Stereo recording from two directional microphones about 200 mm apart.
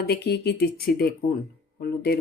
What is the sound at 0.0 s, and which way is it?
Speech, 55° left (ahead or behind).